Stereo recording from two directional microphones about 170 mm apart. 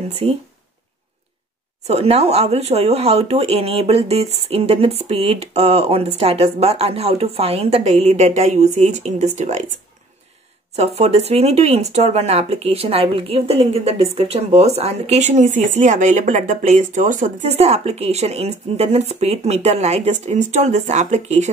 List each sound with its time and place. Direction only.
0.1 s speech: 35° right (ahead or behind)
1.9 s speech: 40° right (ahead or behind)
10.8 s speech: 40° right (ahead or behind)